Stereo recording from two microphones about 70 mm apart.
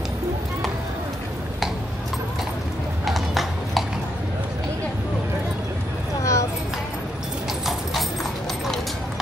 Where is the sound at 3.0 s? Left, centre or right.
Centre.